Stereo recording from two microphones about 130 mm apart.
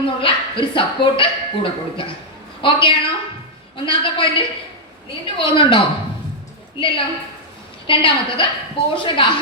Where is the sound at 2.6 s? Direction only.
40° left (ahead or behind).